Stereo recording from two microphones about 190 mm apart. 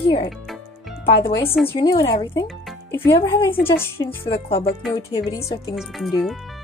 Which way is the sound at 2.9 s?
15° left (ahead or behind).